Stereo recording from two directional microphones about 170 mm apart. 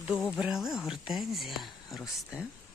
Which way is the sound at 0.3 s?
5° right (ahead or behind).